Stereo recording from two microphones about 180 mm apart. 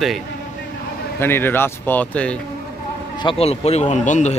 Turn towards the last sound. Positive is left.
turn(degrees=40)  # may be behind; listen again after turning